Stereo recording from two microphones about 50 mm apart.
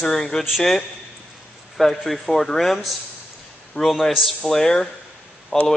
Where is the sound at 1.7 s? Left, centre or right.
Centre.